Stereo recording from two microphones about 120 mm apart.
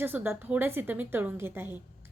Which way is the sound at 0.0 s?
15° right (ahead or behind).